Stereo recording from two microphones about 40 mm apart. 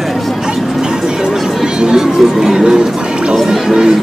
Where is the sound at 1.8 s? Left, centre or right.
Centre.